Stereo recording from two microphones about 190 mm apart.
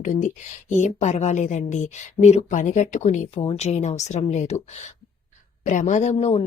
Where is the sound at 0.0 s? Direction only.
40° left (ahead or behind).